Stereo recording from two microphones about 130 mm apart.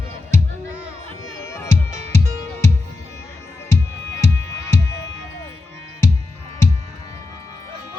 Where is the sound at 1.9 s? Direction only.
65° right (ahead or behind).